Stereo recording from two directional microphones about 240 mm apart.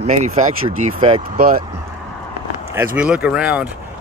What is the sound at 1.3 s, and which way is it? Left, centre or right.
Speech, right.